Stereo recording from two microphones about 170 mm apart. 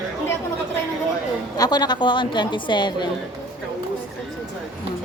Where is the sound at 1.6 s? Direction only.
25° left (ahead or behind).